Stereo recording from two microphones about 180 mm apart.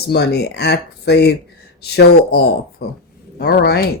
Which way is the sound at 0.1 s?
65° left (ahead or behind).